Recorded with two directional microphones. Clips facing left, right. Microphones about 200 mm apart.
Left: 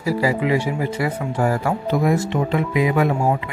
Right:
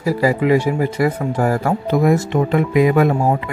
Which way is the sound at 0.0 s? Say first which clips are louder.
Right 3 dB; 45° right (ahead or behind).